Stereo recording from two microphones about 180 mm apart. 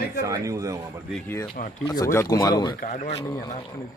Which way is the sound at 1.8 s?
20° left (ahead or behind).